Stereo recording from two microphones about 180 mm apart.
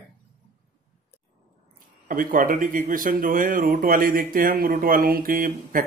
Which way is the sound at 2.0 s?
50° right (ahead or behind).